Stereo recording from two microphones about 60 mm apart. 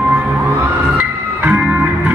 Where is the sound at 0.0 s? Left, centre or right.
Right.